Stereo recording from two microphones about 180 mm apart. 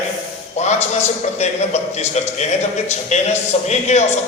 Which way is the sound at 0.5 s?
40° left (ahead or behind).